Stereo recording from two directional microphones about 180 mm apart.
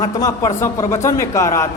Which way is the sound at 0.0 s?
20° left (ahead or behind).